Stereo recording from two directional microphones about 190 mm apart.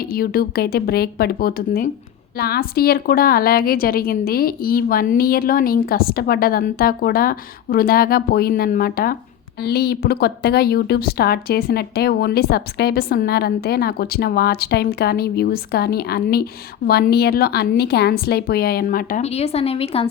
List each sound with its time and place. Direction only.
0.0 s a woman's voice: 50° left (ahead or behind)
19.2 s a woman's voice: 35° left (ahead or behind)